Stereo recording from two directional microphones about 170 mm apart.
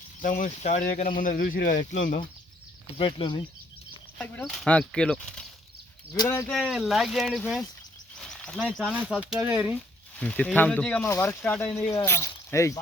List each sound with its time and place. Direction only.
0.2 s speech: 50° left (ahead or behind)
3.0 s speech: 30° left (ahead or behind)
4.2 s speech: 5° left (ahead or behind)
6.1 s speech: 15° left (ahead or behind)
6.5 s speech: centre (ahead or behind)
8.2 s a sound: 5° left (ahead or behind)
8.9 s speech: centre (ahead or behind)
10.2 s speech: 10° left (ahead or behind)